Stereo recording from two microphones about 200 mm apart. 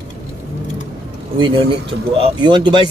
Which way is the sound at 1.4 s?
25° right (ahead or behind).